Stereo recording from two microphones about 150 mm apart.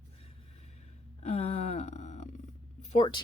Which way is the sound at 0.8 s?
50° left (ahead or behind).